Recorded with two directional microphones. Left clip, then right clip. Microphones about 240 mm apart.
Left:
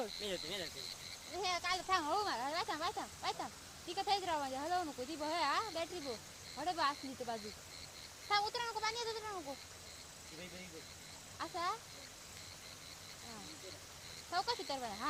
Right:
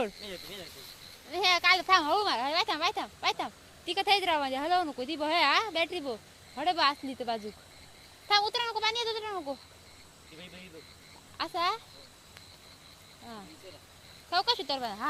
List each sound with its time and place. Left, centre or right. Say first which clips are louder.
0.2 s speech: even; centre
1.4 s speech: right 14 dB; right
11.3 s speech: right 9 dB; right
14.3 s speech: right 10 dB; right